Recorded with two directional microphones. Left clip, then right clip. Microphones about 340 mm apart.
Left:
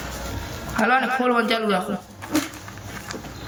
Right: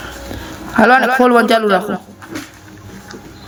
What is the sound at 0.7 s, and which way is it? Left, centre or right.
A man's voice, centre.